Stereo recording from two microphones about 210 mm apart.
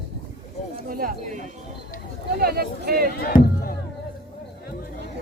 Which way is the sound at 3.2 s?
45° left (ahead or behind).